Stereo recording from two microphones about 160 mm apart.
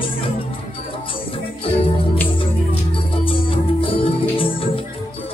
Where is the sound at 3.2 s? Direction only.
35° left (ahead or behind).